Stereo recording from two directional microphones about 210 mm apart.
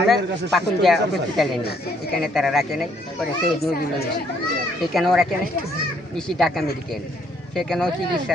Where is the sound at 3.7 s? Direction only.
45° left (ahead or behind).